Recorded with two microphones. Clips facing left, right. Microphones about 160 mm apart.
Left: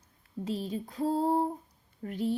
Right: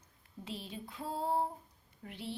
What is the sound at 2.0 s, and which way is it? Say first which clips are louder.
Speech: left 12 dB; 45° left (ahead or behind).